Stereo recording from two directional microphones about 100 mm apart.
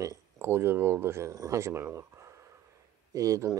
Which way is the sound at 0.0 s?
30° right (ahead or behind).